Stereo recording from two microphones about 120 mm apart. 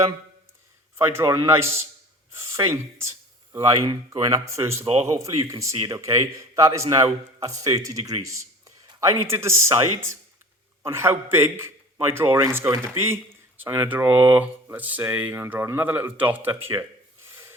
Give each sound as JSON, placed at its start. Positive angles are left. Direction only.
{"t": 0.9, "sound": "a man's voice", "side_deg": -25}
{"t": 8.2, "sound": "a sound", "side_deg": -25}
{"t": 9.2, "sound": "a man's voice", "side_deg": -25}